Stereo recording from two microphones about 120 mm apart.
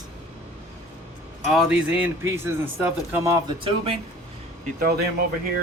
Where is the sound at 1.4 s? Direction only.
5° right (ahead or behind).